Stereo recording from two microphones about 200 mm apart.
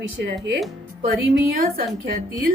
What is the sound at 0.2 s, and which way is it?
A woman's voice, 55° right (ahead or behind).